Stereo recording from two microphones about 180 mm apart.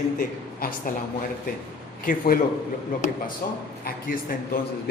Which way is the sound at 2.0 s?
50° left (ahead or behind).